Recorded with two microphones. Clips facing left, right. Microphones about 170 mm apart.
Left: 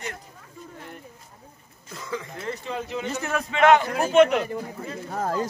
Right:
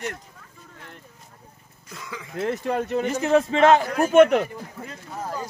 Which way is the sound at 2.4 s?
55° right (ahead or behind).